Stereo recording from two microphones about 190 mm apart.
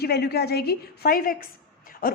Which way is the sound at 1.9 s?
50° left (ahead or behind).